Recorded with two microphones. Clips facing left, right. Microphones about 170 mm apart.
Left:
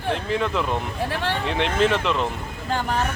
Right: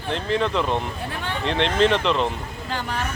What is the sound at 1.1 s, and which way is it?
Speech, 75° left (ahead or behind).